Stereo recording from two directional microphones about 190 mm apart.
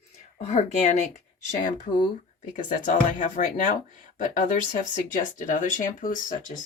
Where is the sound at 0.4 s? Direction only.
35° left (ahead or behind).